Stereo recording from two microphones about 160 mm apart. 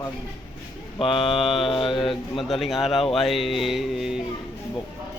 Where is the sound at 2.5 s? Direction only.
Centre (ahead or behind).